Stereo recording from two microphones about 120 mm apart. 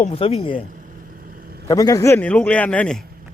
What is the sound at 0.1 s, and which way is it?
Speech, 55° left (ahead or behind).